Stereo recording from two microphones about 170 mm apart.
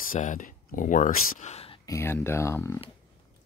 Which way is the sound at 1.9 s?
15° left (ahead or behind).